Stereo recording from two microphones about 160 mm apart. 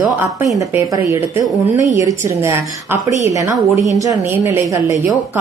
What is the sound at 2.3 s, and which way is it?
A woman's voice, 15° right (ahead or behind).